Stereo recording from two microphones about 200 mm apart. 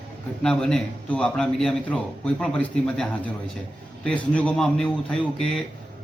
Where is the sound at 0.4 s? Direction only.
5° left (ahead or behind).